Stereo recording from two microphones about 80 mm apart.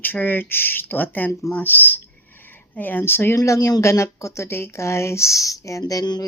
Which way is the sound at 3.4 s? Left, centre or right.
Left.